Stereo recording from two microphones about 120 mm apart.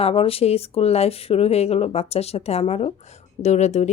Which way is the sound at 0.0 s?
55° left (ahead or behind).